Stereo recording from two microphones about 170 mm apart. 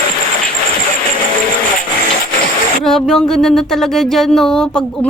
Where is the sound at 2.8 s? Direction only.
5° left (ahead or behind).